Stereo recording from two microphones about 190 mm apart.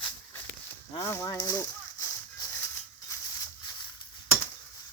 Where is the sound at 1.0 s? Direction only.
15° left (ahead or behind).